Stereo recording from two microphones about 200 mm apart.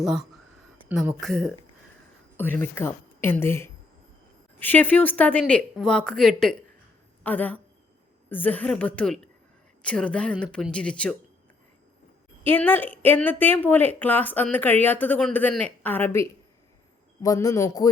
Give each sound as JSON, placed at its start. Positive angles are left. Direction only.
{"t": 0.9, "sound": "speech", "side_deg": -5}
{"t": 12.5, "sound": "speech", "side_deg": 10}